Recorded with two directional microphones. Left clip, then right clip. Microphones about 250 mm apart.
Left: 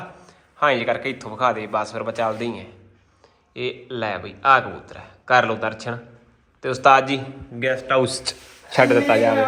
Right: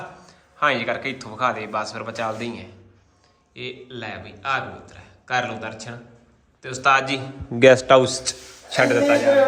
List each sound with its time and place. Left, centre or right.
0.3 s a man's voice: centre
7.6 s a man's voice: right
8.0 s a man's voice: centre